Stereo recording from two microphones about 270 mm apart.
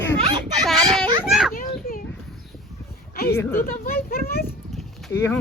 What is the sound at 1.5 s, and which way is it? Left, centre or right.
Children playing, left.